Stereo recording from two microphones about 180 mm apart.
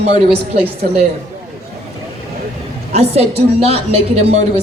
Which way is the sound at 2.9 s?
35° right (ahead or behind).